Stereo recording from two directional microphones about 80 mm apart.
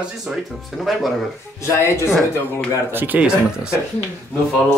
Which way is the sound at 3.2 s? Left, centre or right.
Centre.